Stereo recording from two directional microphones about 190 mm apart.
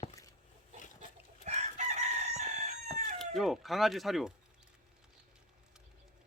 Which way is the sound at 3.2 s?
Centre (ahead or behind).